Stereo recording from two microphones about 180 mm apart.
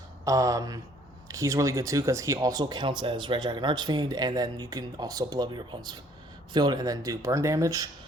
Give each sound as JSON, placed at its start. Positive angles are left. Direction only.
{"t": 0.3, "sound": "speech", "side_deg": -20}